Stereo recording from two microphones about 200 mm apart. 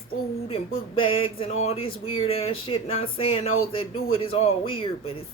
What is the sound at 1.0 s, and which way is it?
Speech, 25° left (ahead or behind).